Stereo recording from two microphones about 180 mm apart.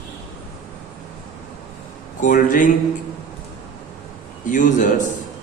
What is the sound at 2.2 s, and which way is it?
Speech, 45° left (ahead or behind).